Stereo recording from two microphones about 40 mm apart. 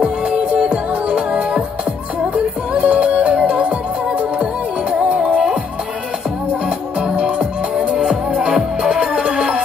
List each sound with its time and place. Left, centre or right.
0.0 s music: right
5.0 s music: right
7.0 s music: right
9.0 s music: right